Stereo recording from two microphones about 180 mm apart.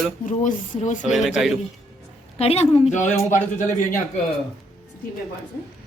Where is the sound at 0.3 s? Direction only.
45° left (ahead or behind).